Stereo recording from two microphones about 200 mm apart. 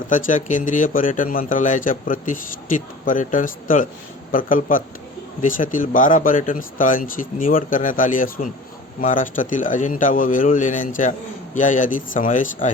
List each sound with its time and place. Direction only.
0.1 s a man's voice: 40° left (ahead or behind)